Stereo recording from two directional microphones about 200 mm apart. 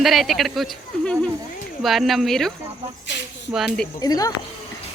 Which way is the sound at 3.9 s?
20° left (ahead or behind).